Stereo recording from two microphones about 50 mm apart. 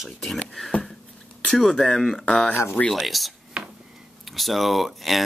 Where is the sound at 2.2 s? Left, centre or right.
Centre.